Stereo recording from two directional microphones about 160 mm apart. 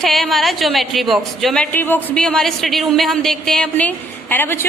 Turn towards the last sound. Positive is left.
turn(degrees=15)  # may be behind; listen again after turning